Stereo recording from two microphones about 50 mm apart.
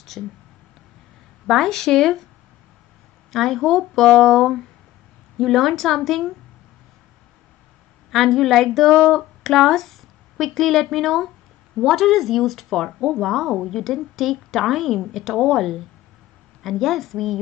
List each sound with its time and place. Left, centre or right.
0.2 s speech: centre
1.5 s speech: centre
3.3 s speech: centre
8.1 s speech: centre